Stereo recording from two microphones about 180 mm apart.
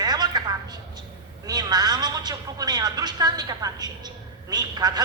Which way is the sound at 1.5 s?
20° right (ahead or behind).